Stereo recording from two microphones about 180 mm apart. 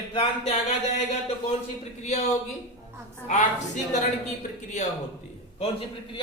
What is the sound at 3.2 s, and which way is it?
A woman's voice, 40° left (ahead or behind).